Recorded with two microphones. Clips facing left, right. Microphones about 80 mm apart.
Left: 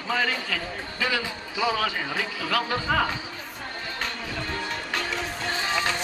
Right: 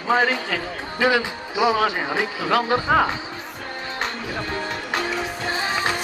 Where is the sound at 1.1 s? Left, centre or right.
Centre.